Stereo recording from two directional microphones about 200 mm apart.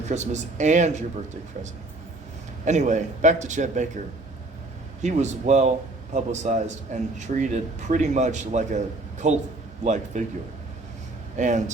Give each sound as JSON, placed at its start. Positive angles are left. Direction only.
{"t": 0.1, "sound": "a man's voice", "side_deg": -35}
{"t": 2.6, "sound": "a man's voice", "side_deg": -35}
{"t": 5.0, "sound": "a man's voice", "side_deg": -35}
{"t": 11.3, "sound": "a man's voice", "side_deg": -35}